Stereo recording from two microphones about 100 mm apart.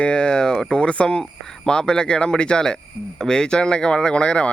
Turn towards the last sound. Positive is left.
turn(degrees=10)  # may be behind; listen again after turning